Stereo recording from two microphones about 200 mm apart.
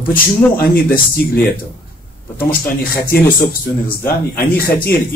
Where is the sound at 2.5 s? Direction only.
45° left (ahead or behind).